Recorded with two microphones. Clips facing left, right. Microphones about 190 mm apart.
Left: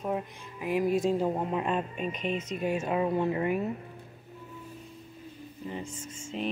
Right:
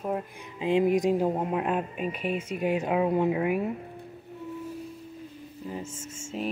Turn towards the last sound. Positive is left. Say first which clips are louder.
# right 1 dB
turn(degrees=-5)  # may be behind; listen again after turning